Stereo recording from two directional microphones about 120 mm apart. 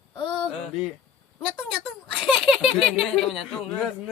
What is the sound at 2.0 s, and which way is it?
Speech, 5° right (ahead or behind).